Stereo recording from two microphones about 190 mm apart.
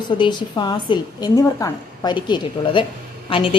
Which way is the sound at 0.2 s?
25° left (ahead or behind).